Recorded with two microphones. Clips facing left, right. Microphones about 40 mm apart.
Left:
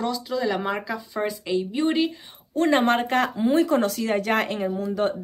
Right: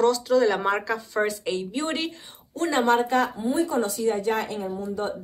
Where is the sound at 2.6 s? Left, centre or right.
Left.